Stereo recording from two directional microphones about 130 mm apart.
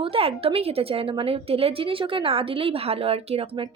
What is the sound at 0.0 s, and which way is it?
A woman's voice, 45° right (ahead or behind).